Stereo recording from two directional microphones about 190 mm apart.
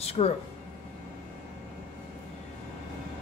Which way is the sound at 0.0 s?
35° left (ahead or behind).